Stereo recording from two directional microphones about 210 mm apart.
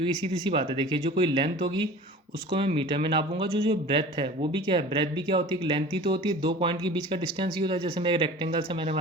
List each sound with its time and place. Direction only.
0.5 s speech: 25° right (ahead or behind)